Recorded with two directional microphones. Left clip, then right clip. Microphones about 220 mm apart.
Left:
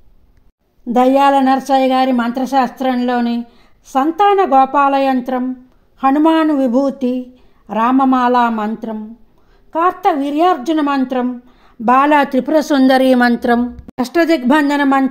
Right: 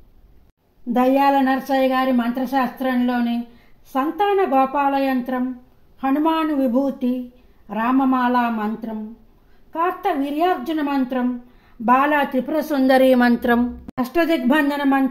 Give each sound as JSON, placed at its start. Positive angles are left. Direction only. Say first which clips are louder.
{"t": 0.9, "sound": "speech", "louder": "left 6 dB", "side_deg": 40}
{"t": 13.9, "sound": "speech", "louder": "left 6 dB", "side_deg": 35}